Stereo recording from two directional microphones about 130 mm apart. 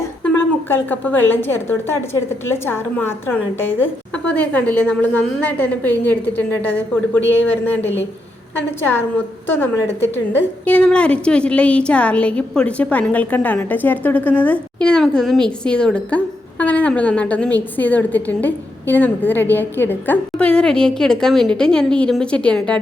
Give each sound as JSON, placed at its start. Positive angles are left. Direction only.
{"t": 0.2, "sound": "a woman's voice", "side_deg": 15}
{"t": 10.7, "sound": "a woman's voice", "side_deg": 10}